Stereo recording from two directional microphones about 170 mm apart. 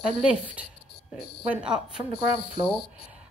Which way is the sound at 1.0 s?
75° left (ahead or behind).